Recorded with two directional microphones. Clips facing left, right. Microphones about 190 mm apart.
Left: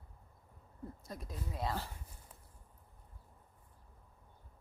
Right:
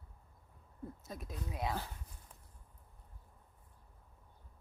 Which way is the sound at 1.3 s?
Centre (ahead or behind).